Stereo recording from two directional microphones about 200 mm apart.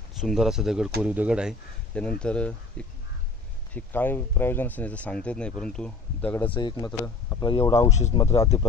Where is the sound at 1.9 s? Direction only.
5° left (ahead or behind).